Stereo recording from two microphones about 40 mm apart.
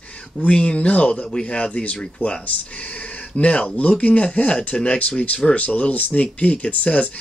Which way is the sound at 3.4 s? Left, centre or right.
Left.